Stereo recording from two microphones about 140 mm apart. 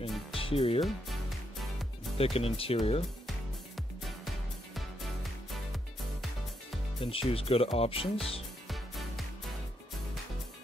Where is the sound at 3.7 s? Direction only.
Centre (ahead or behind).